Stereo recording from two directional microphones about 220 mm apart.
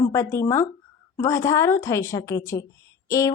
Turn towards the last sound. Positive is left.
turn(degrees=15)  # may be behind; listen again after turning